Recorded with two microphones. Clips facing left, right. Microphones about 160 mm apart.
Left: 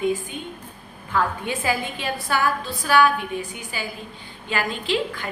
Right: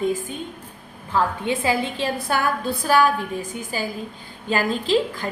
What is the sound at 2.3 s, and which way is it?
Speech, 45° right (ahead or behind).